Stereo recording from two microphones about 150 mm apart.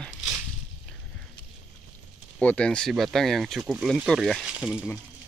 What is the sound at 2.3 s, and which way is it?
Speech, 10° left (ahead or behind).